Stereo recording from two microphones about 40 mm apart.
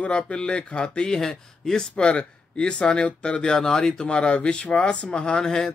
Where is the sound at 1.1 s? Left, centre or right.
Centre.